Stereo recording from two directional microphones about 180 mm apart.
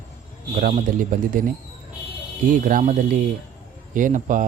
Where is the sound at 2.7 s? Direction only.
50° right (ahead or behind).